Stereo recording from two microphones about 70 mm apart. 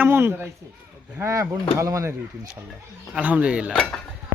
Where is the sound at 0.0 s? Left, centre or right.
Right.